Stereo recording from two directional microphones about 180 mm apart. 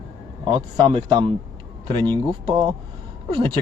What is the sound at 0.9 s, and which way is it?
A man's voice, 30° right (ahead or behind).